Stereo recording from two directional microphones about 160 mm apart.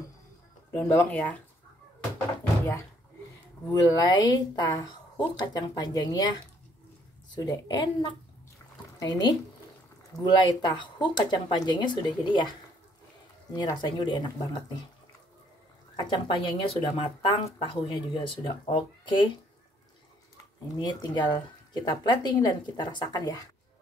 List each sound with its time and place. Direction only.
0.7 s speech: 10° left (ahead or behind)
3.7 s a woman's voice: 25° left (ahead or behind)
16.0 s speech: 30° left (ahead or behind)
20.7 s a woman's voice: 25° left (ahead or behind)